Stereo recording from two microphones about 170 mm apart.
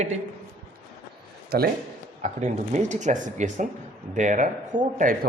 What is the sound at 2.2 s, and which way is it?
A man's voice, 45° right (ahead or behind).